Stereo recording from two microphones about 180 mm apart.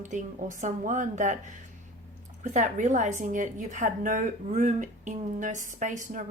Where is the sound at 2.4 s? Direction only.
45° right (ahead or behind).